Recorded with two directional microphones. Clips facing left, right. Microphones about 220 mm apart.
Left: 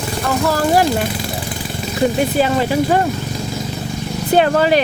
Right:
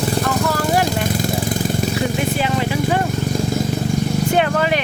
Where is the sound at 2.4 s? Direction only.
40° left (ahead or behind).